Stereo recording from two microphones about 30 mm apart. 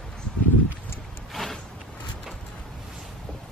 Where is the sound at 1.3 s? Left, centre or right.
Centre.